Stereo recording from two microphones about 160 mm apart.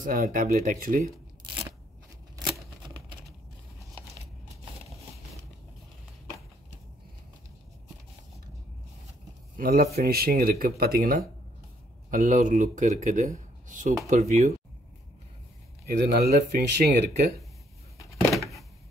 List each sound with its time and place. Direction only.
0.0 s speech: 55° right (ahead or behind)
9.6 s speech: 65° right (ahead or behind)
12.1 s speech: 55° right (ahead or behind)
16.1 s speech: 75° right (ahead or behind)
18.4 s a sound: centre (ahead or behind)